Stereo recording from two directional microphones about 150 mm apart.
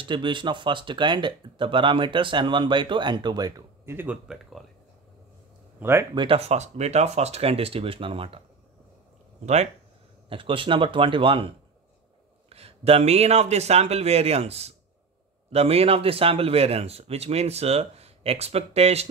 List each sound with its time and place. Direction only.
0.0 s speech: 30° right (ahead or behind); by 4.2 s 15° right (ahead or behind)
4.3 s speech: centre (ahead or behind)
5.8 s speech: 15° right (ahead or behind)
6.1 s speech: 40° right (ahead or behind)
10.3 s a man's voice: 35° right (ahead or behind)